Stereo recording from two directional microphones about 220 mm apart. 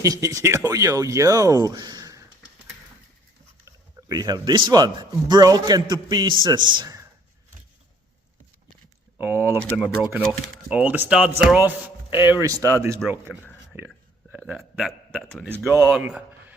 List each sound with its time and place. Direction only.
0.0 s a man's voice: 15° right (ahead or behind)
3.7 s a man's voice: 15° right (ahead or behind)
9.1 s speech: 10° right (ahead or behind)
9.6 s a man's voice: centre (ahead or behind)
13.3 s a sound: 10° left (ahead or behind)
14.3 s a man's voice: 5° right (ahead or behind)
15.4 s speech: 10° right (ahead or behind)